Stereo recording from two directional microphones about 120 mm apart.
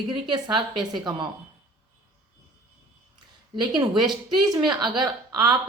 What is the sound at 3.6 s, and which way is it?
Speech, 40° right (ahead or behind).